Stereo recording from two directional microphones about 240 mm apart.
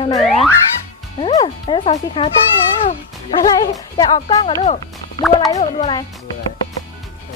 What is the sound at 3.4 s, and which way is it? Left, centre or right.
Speech, centre.